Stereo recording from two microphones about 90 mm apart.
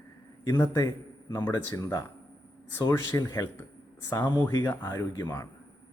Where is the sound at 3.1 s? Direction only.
30° left (ahead or behind).